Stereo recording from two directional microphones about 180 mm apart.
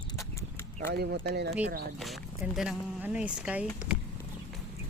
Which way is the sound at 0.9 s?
65° right (ahead or behind).